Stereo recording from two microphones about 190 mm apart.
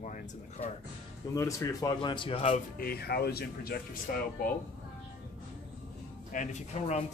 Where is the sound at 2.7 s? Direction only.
55° left (ahead or behind).